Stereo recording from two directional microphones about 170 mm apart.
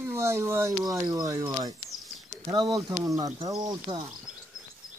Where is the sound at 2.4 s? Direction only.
25° right (ahead or behind).